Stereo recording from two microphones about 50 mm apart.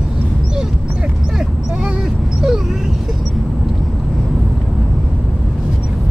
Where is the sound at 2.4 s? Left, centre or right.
Centre.